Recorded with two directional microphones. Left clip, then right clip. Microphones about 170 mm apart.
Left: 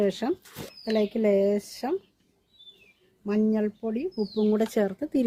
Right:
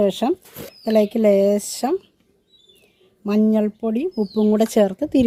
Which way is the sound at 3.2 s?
75° right (ahead or behind).